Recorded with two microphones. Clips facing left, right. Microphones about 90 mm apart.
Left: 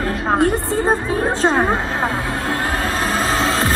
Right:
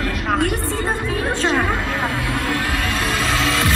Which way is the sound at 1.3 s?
35° left (ahead or behind).